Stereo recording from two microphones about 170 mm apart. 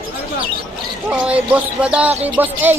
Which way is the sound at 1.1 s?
10° right (ahead or behind).